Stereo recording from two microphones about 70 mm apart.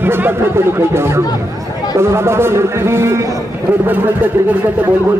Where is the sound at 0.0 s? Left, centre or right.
Right.